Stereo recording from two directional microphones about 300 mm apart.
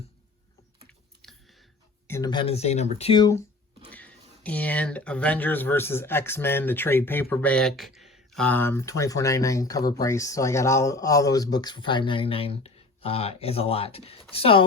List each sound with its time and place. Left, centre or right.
0.9 s typing: centre
2.0 s speech: centre